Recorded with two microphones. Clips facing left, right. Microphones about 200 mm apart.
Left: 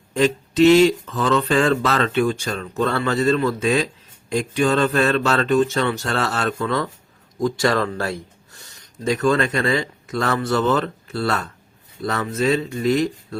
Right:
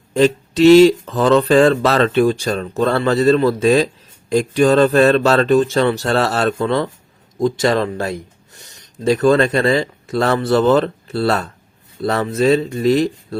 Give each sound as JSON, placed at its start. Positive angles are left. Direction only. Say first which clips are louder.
{"t": 0.2, "sound": "speech", "louder": "right 3 dB", "side_deg": -35}
{"t": 9.0, "sound": "speech", "louder": "right 6 dB", "side_deg": -35}